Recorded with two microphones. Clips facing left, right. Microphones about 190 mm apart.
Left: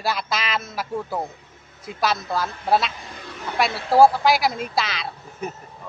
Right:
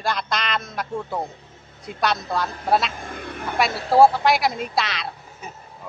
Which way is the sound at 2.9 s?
50° right (ahead or behind).